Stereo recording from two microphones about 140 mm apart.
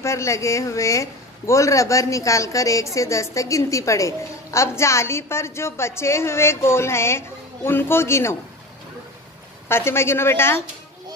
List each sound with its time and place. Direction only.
0.0 s a man's voice: 20° left (ahead or behind)
9.7 s a woman's voice: 15° left (ahead or behind)